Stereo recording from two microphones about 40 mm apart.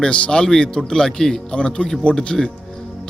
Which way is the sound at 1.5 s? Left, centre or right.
Left.